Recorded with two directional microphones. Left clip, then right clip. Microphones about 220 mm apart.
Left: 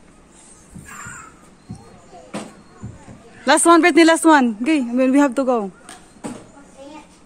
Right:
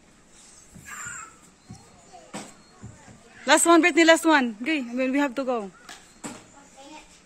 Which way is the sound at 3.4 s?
5° left (ahead or behind).